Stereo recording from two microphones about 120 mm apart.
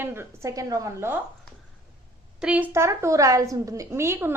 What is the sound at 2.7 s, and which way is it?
A woman's voice, 25° right (ahead or behind).